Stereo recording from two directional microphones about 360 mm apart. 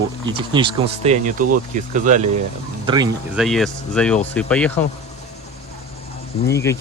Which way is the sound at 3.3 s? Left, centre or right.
Centre.